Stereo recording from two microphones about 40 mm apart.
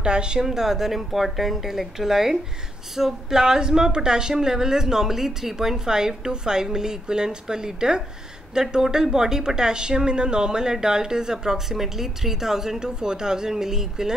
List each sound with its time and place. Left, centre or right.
0.0 s a woman's voice: right
0.4 s speech: centre